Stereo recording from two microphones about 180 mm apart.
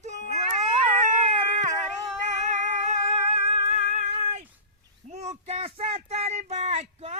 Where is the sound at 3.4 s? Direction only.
35° right (ahead or behind).